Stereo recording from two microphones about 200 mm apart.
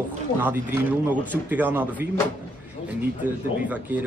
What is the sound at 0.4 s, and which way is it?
Speech, 10° right (ahead or behind).